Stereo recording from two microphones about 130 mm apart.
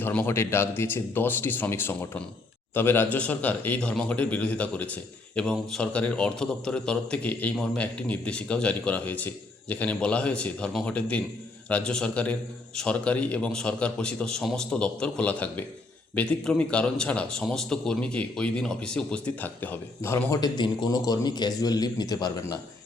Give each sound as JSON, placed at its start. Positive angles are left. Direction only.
{"t": 0.0, "sound": "a man's voice", "side_deg": 15}
{"t": 20.4, "sound": "a man's voice", "side_deg": 30}